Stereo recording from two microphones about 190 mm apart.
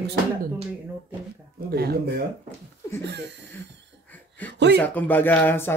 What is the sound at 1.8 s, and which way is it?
Speech, 55° right (ahead or behind).